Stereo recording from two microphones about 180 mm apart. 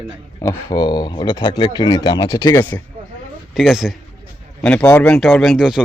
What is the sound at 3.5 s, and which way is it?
Speech, centre (ahead or behind).